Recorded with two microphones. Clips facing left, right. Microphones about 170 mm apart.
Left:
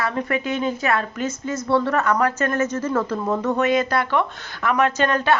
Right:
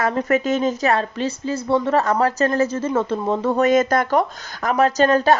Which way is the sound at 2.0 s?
35° right (ahead or behind).